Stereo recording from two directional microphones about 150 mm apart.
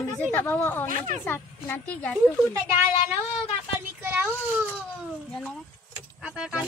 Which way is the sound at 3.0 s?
10° right (ahead or behind).